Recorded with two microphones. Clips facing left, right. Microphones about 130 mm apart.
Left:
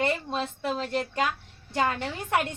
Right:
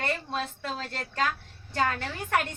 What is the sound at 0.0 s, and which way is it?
A woman's voice, 20° left (ahead or behind).